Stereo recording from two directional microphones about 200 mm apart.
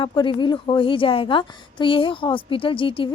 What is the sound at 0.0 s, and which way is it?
A woman's voice, 25° left (ahead or behind).